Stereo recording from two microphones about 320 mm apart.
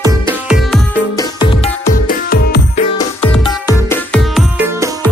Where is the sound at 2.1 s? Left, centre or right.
Left.